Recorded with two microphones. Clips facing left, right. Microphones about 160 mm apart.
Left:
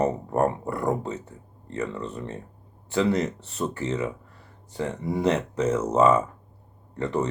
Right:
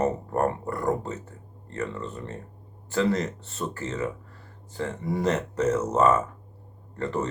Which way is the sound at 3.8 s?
15° left (ahead or behind).